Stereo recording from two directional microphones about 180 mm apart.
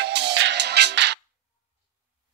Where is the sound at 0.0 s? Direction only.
70° right (ahead or behind).